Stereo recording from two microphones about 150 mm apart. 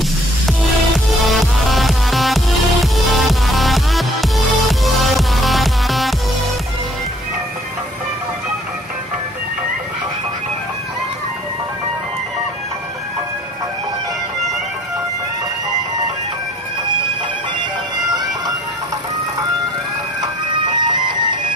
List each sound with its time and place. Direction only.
0.5 s music: centre (ahead or behind)
20.8 s music: 30° right (ahead or behind)